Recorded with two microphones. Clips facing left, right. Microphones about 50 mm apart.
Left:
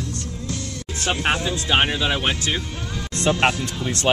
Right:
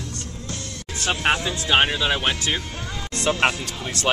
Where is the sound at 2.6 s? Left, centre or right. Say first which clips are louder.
Left 1 dB; right.